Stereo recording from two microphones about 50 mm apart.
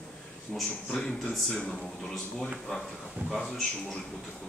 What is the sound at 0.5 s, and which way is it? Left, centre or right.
A man's voice, centre.